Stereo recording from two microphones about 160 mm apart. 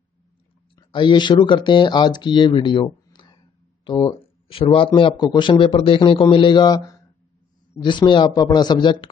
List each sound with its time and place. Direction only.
0.7 s speech: 30° left (ahead or behind)
4.2 s a man's voice: 35° left (ahead or behind)